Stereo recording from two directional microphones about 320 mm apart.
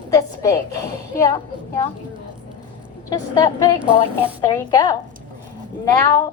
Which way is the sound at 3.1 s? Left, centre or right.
Centre.